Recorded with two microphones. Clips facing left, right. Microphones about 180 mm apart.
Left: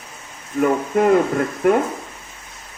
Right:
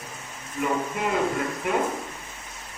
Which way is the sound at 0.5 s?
50° left (ahead or behind).